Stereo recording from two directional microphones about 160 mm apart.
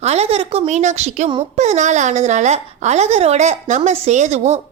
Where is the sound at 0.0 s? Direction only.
40° right (ahead or behind).